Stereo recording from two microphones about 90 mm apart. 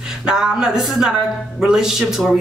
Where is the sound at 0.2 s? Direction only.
10° right (ahead or behind).